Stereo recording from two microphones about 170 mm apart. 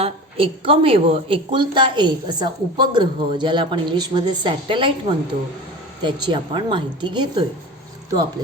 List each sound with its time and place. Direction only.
0.0 s a woman's voice: 30° right (ahead or behind)